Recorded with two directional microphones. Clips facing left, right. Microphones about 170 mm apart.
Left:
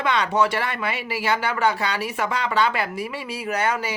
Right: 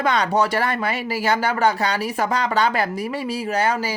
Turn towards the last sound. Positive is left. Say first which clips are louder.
# right 2 dB
turn(degrees=-35)  # may be behind; listen again after turning